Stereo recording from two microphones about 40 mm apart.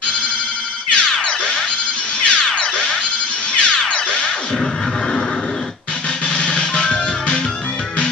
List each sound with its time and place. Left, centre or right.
0.8 s music: left
6.3 s music: left